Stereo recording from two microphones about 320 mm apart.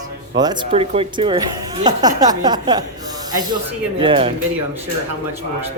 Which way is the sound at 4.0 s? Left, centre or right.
Centre.